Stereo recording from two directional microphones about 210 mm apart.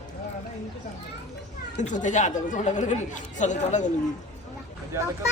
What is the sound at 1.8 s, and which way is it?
Speech, 35° left (ahead or behind).